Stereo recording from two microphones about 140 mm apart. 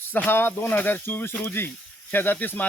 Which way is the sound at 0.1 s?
15° left (ahead or behind).